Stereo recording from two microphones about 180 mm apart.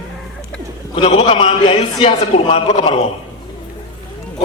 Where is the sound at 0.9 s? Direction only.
30° left (ahead or behind).